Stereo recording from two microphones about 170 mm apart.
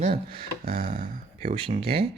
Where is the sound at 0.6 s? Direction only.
60° right (ahead or behind).